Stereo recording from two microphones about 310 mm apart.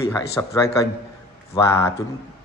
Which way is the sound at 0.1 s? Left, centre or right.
Centre.